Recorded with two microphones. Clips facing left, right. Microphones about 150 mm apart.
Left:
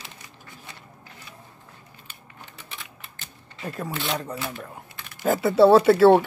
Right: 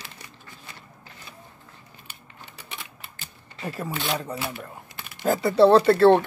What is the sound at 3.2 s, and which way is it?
Shuffling cards, 5° right (ahead or behind).